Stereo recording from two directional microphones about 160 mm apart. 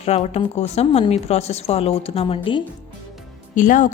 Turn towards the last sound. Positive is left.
turn(degrees=55)  # may be behind; listen again after turning